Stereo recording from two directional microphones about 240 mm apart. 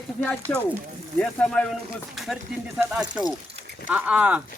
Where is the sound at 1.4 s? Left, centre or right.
Centre.